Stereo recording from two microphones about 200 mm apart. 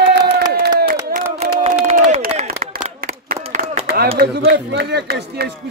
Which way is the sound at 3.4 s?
35° right (ahead or behind).